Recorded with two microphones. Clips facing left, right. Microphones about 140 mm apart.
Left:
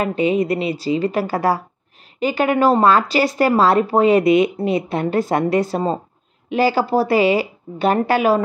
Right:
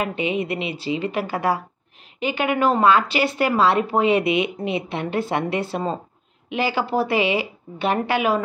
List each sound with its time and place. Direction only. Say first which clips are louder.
0.0 s speech: left 6 dB; 40° left (ahead or behind)